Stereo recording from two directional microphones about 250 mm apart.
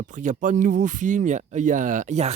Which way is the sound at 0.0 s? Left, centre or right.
Right.